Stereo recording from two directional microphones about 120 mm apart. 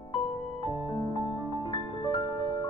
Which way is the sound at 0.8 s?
40° left (ahead or behind).